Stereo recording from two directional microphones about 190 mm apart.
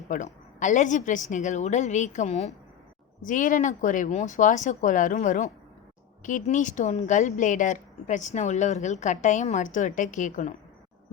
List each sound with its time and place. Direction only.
0.1 s a woman's voice: 40° left (ahead or behind)